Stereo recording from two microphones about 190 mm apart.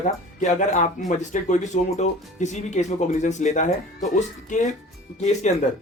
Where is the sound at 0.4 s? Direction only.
40° left (ahead or behind).